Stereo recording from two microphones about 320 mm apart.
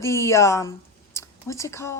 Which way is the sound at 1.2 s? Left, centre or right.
Centre.